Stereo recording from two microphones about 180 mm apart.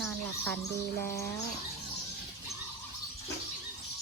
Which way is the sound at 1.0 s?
15° left (ahead or behind).